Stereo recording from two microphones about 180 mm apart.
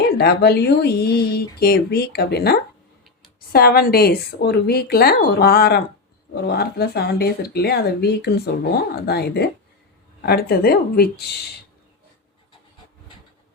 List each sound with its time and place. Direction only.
0.2 s speech: 65° left (ahead or behind)